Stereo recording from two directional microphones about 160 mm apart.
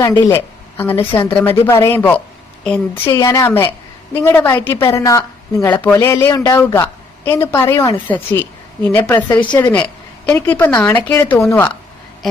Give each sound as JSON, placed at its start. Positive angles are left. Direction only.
{"t": 0.2, "sound": "a woman's voice", "side_deg": 15}
{"t": 9.6, "sound": "a woman's voice", "side_deg": 25}
{"t": 10.2, "sound": "a woman's voice", "side_deg": 15}